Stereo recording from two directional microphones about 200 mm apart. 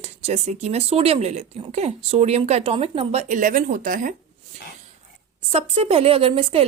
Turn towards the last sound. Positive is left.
turn(degrees=-30)  # may be behind; listen again after turning